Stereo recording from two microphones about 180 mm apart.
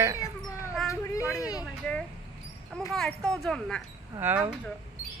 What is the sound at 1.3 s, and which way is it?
Speech, 20° left (ahead or behind).